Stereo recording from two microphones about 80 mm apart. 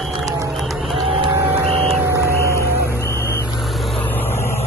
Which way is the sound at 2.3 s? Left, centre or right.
Left.